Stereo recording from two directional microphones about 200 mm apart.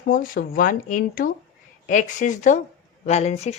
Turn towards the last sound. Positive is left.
turn(degrees=35)  # may be behind; listen again after turning